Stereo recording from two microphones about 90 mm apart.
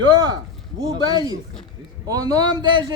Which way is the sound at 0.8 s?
50° right (ahead or behind).